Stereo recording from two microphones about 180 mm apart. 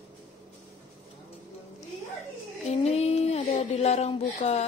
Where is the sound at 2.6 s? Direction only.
35° left (ahead or behind).